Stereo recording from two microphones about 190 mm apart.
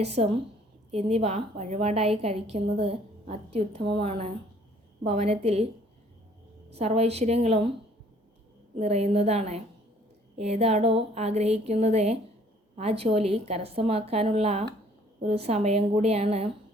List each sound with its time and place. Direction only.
0.0 s a woman's voice: 35° right (ahead or behind)
6.7 s a woman's voice: 35° right (ahead or behind)
8.8 s a woman's voice: 35° right (ahead or behind)